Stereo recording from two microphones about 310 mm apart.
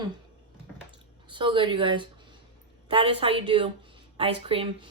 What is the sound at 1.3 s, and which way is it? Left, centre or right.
A woman's voice, centre.